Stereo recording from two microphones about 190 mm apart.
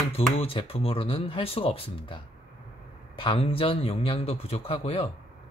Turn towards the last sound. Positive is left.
turn(degrees=30)  # may be behind; listen again after turning